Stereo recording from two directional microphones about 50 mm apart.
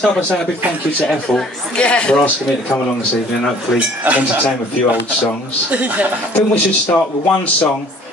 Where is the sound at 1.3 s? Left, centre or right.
Centre.